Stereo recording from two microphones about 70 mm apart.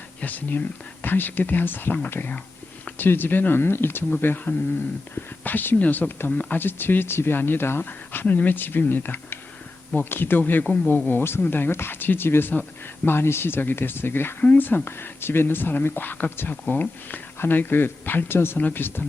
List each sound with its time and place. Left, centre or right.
0.2 s speech: left
6.3 s speech: centre
6.6 s speech: left